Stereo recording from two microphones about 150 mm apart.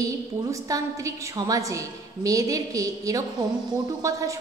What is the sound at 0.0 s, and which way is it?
A woman's voice, 25° right (ahead or behind).